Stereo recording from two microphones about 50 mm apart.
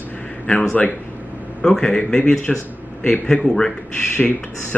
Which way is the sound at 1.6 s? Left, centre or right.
Centre.